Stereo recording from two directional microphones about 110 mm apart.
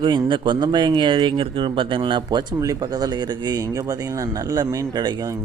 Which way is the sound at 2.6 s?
35° right (ahead or behind).